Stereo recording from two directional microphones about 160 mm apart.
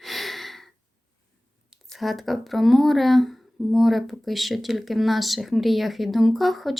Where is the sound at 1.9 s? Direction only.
Centre (ahead or behind).